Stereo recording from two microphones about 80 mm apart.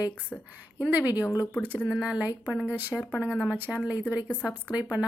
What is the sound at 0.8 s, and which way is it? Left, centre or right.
Speech, right.